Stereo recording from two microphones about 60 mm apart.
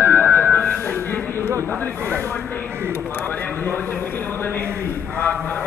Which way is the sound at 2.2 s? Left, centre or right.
Left.